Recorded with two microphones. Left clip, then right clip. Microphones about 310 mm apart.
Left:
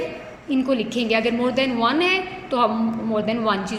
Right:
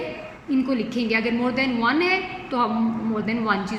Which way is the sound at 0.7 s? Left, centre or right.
Centre.